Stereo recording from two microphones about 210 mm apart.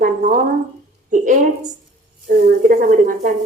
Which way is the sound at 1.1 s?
35° right (ahead or behind).